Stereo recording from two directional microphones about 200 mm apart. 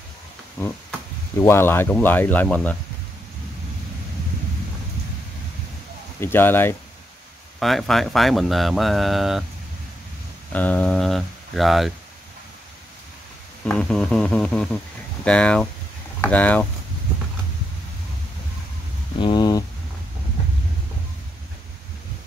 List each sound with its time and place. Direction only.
1.4 s speech: 10° left (ahead or behind)
6.2 s speech: 10° left (ahead or behind)
7.5 s speech: centre (ahead or behind)
10.5 s speech: 10° left (ahead or behind)
13.7 s speech: 5° left (ahead or behind)
19.1 s a sound: 20° left (ahead or behind)